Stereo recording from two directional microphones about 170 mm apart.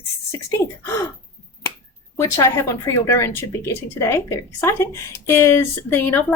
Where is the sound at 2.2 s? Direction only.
15° left (ahead or behind).